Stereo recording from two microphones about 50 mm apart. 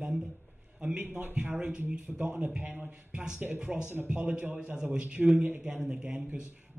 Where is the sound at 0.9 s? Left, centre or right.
Right.